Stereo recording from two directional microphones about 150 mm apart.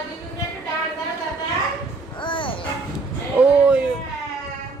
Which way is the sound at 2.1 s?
35° left (ahead or behind).